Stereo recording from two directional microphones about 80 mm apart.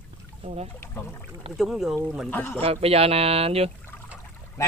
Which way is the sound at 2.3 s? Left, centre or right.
Left.